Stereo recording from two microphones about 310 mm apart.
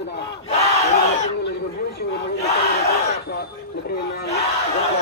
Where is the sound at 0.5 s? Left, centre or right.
Left.